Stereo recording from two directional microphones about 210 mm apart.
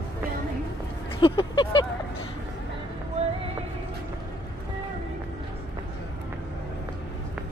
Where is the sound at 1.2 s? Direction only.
25° left (ahead or behind).